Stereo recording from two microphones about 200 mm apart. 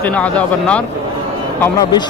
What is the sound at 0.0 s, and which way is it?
Speech, 5° left (ahead or behind).